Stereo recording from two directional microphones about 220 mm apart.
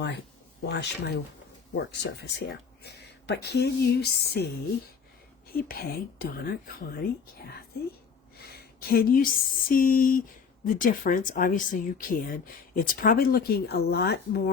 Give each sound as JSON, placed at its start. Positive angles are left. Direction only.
{"t": 0.6, "sound": "speech", "side_deg": 50}
{"t": 5.5, "sound": "speech", "side_deg": 40}
{"t": 8.4, "sound": "speech", "side_deg": 45}